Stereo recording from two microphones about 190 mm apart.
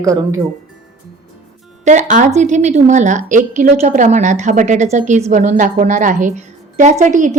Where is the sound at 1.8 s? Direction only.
40° right (ahead or behind).